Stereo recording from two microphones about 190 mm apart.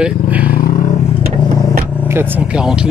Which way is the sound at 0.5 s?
50° left (ahead or behind).